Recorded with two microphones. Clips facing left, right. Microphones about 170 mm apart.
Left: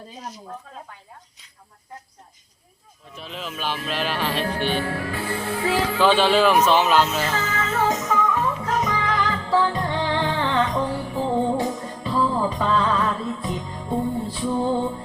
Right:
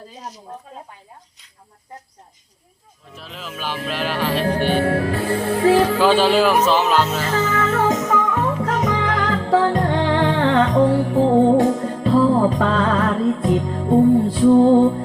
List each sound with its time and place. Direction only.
3.2 s speech: centre (ahead or behind)
3.8 s music: 10° right (ahead or behind)
4.5 s music: 45° right (ahead or behind)
6.0 s speech: 10° right (ahead or behind)
7.4 s music: 50° right (ahead or behind)